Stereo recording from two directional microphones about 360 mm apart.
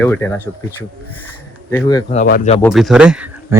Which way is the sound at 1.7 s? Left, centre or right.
Centre.